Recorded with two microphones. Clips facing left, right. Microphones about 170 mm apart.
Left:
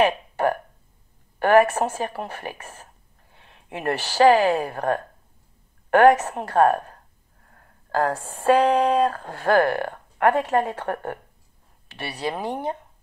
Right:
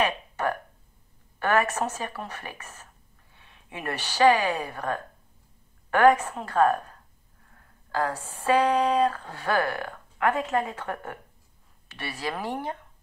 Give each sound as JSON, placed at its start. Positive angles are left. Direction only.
{"t": 0.0, "sound": "a sound", "side_deg": 30}
{"t": 1.4, "sound": "a woman's voice", "side_deg": 30}
{"t": 4.7, "sound": "a woman's voice", "side_deg": 60}
{"t": 5.9, "sound": "a woman's voice", "side_deg": 70}
{"t": 7.4, "sound": "speech", "side_deg": 45}
{"t": 11.9, "sound": "speech", "side_deg": 25}